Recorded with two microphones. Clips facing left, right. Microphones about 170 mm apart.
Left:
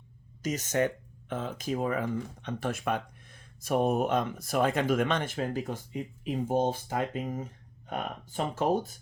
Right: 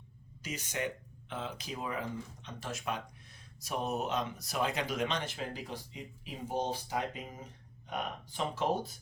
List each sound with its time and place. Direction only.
0.4 s speech: 45° left (ahead or behind)